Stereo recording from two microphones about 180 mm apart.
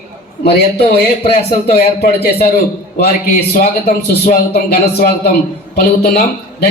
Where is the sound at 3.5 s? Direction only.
55° left (ahead or behind).